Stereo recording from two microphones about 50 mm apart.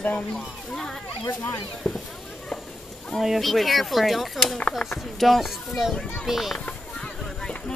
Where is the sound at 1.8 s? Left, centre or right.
Centre.